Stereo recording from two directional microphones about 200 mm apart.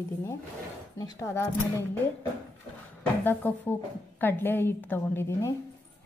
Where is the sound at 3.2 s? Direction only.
10° left (ahead or behind).